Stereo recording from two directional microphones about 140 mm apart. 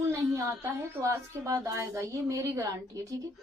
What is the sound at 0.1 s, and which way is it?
A woman's voice, 20° right (ahead or behind).